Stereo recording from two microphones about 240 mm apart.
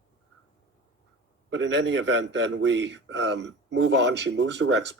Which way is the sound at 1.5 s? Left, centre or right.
Right.